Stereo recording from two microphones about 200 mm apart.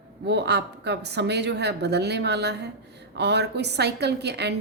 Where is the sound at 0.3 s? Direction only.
60° right (ahead or behind).